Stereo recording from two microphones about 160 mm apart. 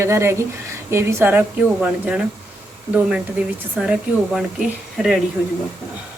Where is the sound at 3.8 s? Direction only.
5° right (ahead or behind).